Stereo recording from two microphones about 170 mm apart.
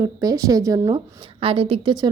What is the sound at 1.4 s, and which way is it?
Speech, 30° right (ahead or behind).